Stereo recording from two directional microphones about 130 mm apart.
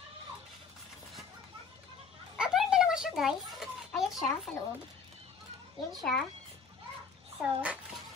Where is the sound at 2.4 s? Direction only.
5° right (ahead or behind).